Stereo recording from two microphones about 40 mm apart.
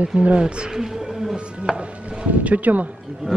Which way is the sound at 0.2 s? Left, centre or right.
Right.